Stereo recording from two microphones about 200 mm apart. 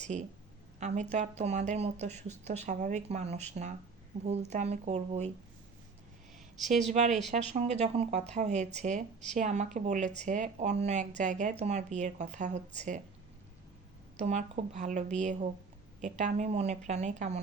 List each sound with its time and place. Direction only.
0.1 s speech: 35° right (ahead or behind)
6.7 s speech: 35° right (ahead or behind)
14.3 s speech: 35° right (ahead or behind)